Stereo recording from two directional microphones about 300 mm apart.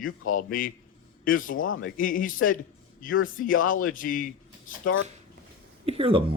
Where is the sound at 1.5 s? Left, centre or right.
Left.